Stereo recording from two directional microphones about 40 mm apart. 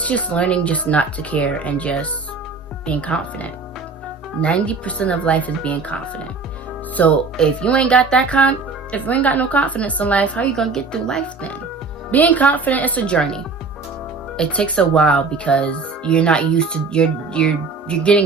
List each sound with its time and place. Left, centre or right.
0.0 s a woman's voice: left
7.3 s speech: left
8.4 s speech: left
10.5 s a woman's voice: centre
12.1 s a woman's voice: left
13.1 s speech: left